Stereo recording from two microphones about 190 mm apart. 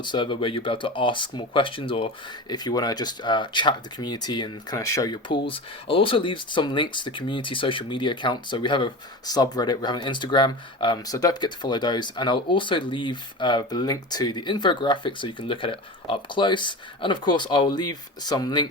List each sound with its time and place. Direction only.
0.0 s speech: 25° left (ahead or behind)